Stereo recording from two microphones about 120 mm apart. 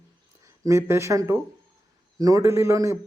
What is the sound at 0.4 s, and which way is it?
A man's voice, 25° right (ahead or behind).